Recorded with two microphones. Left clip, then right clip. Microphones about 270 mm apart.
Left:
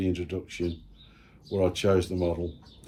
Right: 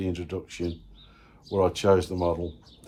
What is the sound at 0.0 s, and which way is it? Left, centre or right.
Speech, centre.